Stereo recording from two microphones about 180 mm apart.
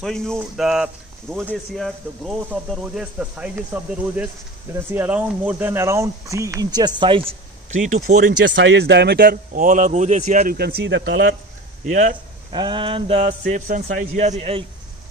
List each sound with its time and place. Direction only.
0.0 s speech: 5° left (ahead or behind); by 7.3 s 30° right (ahead or behind)
7.7 s speech: 45° right (ahead or behind)
8.2 s speech: 65° right (ahead or behind)
11.9 s speech: 45° right (ahead or behind)
12.5 s a sound: 25° right (ahead or behind)
13.5 s a man's voice: 45° right (ahead or behind)